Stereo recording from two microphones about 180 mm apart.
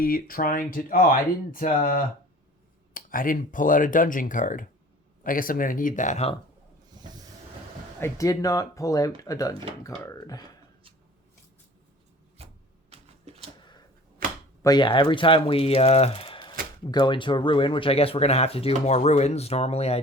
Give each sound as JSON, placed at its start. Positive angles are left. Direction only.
{"t": 0.0, "sound": "speech", "side_deg": 55}
{"t": 8.0, "sound": "speech", "side_deg": 20}
{"t": 12.4, "sound": "a sound", "side_deg": -35}
{"t": 14.6, "sound": "speech", "side_deg": 25}